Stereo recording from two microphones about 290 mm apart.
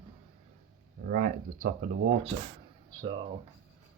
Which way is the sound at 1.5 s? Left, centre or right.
Right.